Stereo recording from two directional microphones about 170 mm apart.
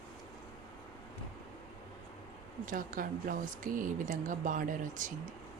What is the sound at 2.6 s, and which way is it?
Speech, 50° right (ahead or behind).